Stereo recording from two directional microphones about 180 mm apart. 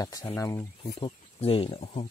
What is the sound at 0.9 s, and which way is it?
Speech, 30° left (ahead or behind).